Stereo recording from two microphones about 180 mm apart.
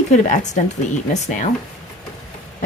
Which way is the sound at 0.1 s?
40° left (ahead or behind).